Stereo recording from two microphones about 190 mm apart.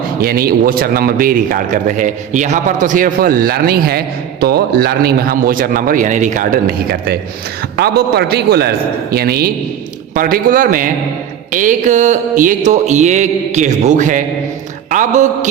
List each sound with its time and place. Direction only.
0.2 s a man's voice: 50° right (ahead or behind)
11.5 s mantra: 40° right (ahead or behind)
14.8 s speech: 40° right (ahead or behind)